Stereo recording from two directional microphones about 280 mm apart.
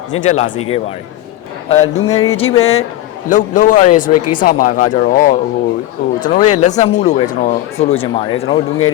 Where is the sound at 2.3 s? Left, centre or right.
Left.